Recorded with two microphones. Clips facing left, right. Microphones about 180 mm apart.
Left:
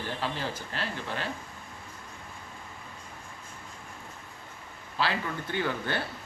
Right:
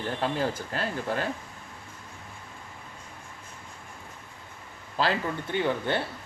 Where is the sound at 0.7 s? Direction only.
45° right (ahead or behind).